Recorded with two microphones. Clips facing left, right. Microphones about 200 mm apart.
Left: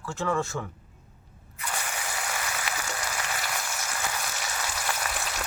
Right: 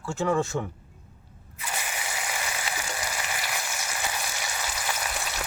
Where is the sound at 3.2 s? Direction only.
10° right (ahead or behind).